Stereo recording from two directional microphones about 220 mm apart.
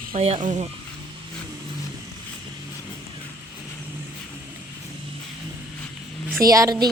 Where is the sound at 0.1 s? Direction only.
25° right (ahead or behind).